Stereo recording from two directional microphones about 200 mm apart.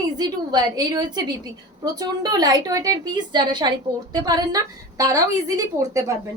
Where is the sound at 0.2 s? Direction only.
20° right (ahead or behind).